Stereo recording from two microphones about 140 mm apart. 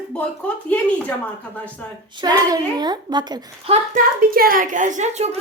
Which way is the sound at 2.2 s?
30° right (ahead or behind).